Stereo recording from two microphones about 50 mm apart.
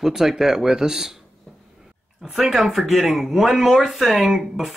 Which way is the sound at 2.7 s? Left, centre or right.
Centre.